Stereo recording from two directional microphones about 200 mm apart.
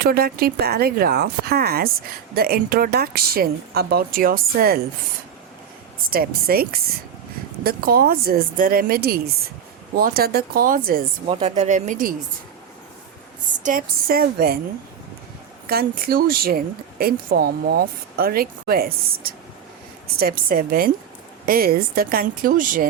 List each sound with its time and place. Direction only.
0.0 s speech: 50° right (ahead or behind)
6.1 s speech: 50° right (ahead or behind)
11.3 s speech: 30° right (ahead or behind)
13.6 s speech: 40° right (ahead or behind)
15.7 s speech: 45° right (ahead or behind)